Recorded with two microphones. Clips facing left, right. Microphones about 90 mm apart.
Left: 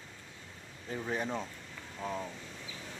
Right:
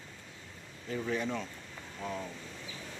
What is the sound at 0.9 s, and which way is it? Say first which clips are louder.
Speech: right 2 dB; 35° left (ahead or behind).